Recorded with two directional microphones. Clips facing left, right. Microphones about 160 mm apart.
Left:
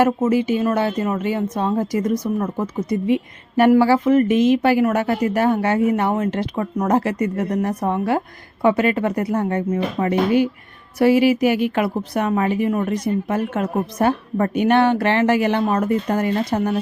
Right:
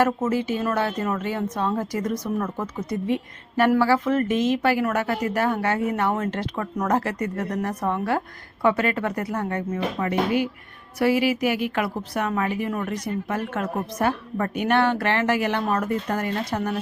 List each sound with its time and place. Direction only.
0.0 s a woman's voice: 15° left (ahead or behind)